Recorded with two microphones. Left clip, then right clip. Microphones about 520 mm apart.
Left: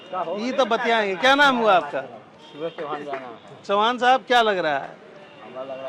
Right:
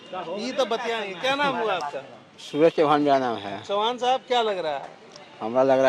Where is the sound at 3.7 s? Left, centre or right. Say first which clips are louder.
Left 5 dB; left.